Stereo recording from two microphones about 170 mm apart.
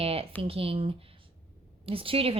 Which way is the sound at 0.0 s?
35° right (ahead or behind).